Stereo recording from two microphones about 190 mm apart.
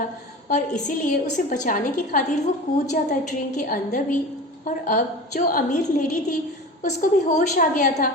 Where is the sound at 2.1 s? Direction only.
45° left (ahead or behind).